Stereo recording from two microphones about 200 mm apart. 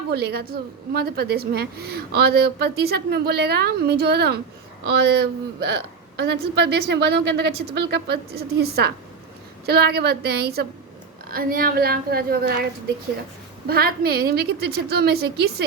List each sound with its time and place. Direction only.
0.1 s a woman's voice: 55° right (ahead or behind)
13.7 s a woman's voice: 50° right (ahead or behind)